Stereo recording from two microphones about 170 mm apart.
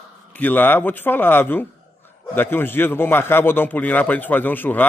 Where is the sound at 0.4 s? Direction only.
10° left (ahead or behind).